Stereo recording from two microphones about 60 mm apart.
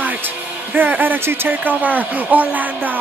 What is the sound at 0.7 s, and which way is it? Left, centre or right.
Speech, right.